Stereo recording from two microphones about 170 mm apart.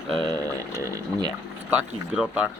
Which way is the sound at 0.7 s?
20° right (ahead or behind).